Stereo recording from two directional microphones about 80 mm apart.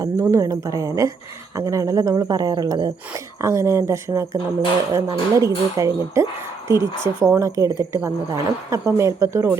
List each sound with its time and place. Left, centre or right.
0.0 s speech: right
3.4 s a woman's voice: right